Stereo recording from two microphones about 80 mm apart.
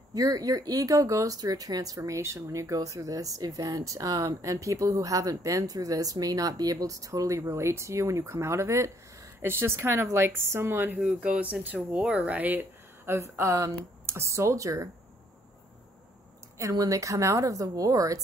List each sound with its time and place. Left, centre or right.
0.1 s speech: right
11.0 s speech: centre
11.2 s speech: centre; by 14.9 s right
16.5 s speech: right